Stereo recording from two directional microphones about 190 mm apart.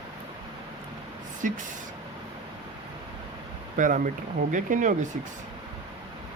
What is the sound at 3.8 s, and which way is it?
Speech, 45° right (ahead or behind).